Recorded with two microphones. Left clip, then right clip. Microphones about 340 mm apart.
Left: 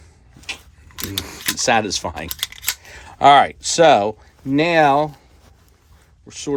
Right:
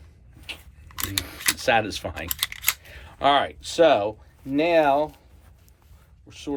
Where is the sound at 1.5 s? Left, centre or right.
Centre.